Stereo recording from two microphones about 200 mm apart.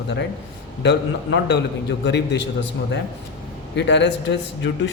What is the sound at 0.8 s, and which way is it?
A man's voice, 60° left (ahead or behind).